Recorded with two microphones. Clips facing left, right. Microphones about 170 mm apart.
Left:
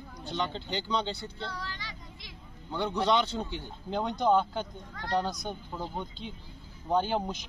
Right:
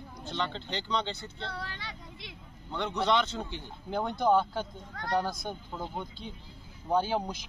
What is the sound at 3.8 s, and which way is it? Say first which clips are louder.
Speech: even; 5° right (ahead or behind).